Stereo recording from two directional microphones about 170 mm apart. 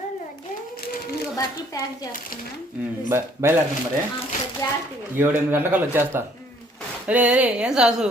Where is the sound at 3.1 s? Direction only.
15° right (ahead or behind).